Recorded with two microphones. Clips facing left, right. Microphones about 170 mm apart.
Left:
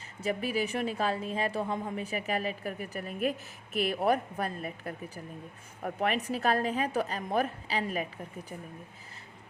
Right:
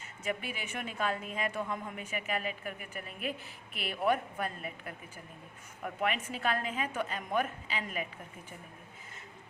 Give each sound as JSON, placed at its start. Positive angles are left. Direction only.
{"t": 0.2, "sound": "a woman's voice", "side_deg": 35}